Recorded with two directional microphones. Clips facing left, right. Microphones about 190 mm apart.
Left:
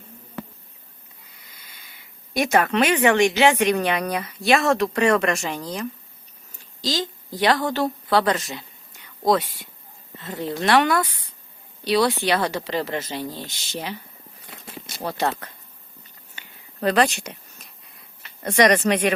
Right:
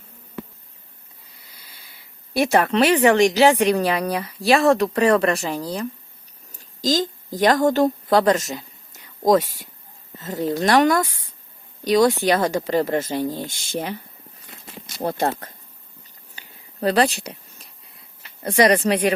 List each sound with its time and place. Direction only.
1.5 s speech: 35° right (ahead or behind)
6.5 s a sound: 40° right (ahead or behind)
9.3 s speech: 45° right (ahead or behind)
15.0 s speech: 45° right (ahead or behind)
16.3 s a sound: 35° right (ahead or behind)
18.4 s speech: 30° right (ahead or behind)